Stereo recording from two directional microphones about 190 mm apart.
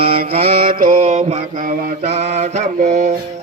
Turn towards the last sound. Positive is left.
turn(degrees=-40)  # may be behind; listen again after turning